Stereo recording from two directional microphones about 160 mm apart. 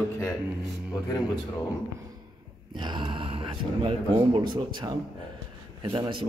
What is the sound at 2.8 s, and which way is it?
Speech, 30° right (ahead or behind).